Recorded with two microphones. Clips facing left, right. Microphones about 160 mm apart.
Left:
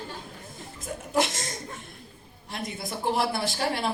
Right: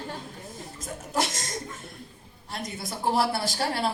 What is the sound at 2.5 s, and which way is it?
A woman's voice, 35° right (ahead or behind).